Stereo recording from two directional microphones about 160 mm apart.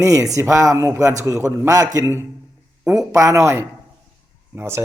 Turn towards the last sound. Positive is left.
turn(degrees=-15)  # may be behind; listen again after turning